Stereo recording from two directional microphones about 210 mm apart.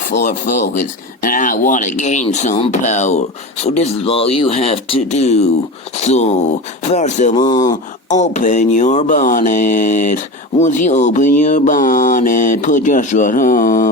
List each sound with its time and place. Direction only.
0.0 s speech: 35° left (ahead or behind)
7.3 s speech: 20° left (ahead or behind)
8.2 s speech: 35° left (ahead or behind)